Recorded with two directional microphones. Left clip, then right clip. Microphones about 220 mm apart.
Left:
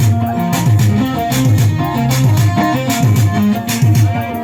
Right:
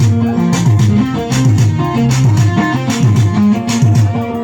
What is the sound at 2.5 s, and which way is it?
Music, 50° left (ahead or behind).